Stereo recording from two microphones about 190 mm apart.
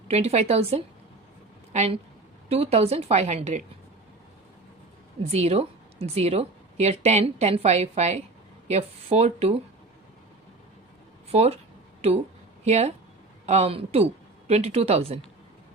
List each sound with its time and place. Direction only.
0.1 s a woman's voice: 35° right (ahead or behind)
5.3 s a woman's voice: 35° right (ahead or behind)
11.3 s a woman's voice: 35° right (ahead or behind)